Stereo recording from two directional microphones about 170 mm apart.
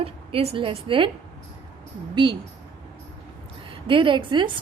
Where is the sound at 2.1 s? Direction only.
30° right (ahead or behind).